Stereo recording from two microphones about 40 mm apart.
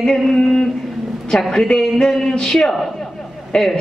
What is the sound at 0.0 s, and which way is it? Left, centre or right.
Speech, centre.